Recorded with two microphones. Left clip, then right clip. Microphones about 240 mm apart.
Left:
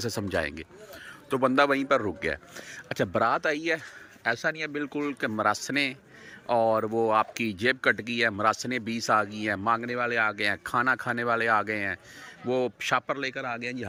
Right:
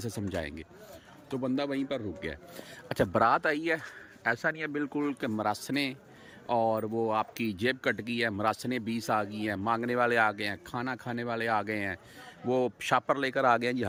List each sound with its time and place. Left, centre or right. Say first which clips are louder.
0.0 s speech: left 7 dB; centre